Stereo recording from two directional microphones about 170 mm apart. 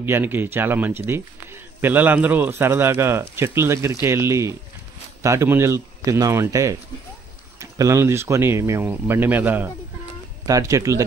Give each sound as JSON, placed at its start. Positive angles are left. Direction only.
{"t": 0.0, "sound": "speech", "side_deg": -10}